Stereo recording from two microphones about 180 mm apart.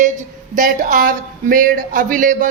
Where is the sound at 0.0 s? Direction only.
45° right (ahead or behind).